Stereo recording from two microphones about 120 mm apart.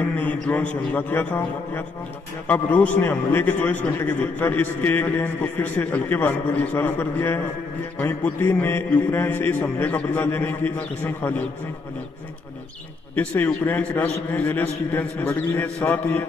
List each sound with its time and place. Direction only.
0.0 s a sound: 15° left (ahead or behind)
0.9 s a man's voice: 10° left (ahead or behind)
13.1 s a man's voice: 15° left (ahead or behind)